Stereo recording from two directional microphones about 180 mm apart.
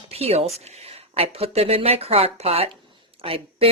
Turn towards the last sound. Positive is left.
turn(degrees=-30)  # may be behind; listen again after turning